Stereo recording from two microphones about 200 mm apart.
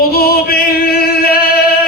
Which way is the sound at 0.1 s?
50° left (ahead or behind).